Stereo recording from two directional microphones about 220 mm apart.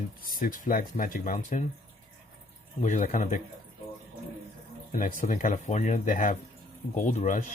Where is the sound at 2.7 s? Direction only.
35° left (ahead or behind).